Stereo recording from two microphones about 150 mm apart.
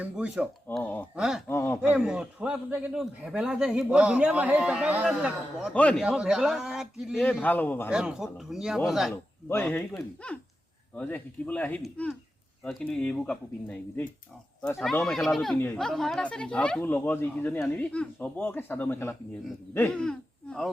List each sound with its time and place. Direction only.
0.0 s a man's voice: 5° right (ahead or behind)
0.8 s speech: 15° left (ahead or behind)
1.1 s speech: 5° right (ahead or behind)
1.5 s speech: 15° left (ahead or behind)
1.8 s a man's voice: 5° right (ahead or behind)
5.7 s speech: 10° left (ahead or behind)
6.1 s speech: 5° right (ahead or behind)
7.4 s speech: 10° left (ahead or behind)
7.9 s speech: 5° right (ahead or behind)
9.5 s speech: 15° left (ahead or behind)
19.9 s speech: 5° left (ahead or behind)